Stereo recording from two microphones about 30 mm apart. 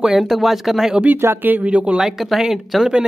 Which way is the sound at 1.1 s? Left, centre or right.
Right.